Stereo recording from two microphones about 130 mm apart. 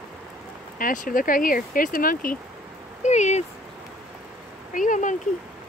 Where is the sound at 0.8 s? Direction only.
90° left.